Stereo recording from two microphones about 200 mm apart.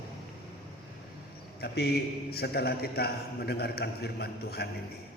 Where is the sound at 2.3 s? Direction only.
50° left (ahead or behind).